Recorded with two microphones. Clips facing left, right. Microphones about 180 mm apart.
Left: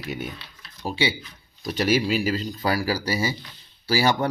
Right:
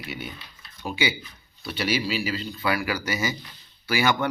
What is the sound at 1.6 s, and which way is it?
Speech, 40° left (ahead or behind).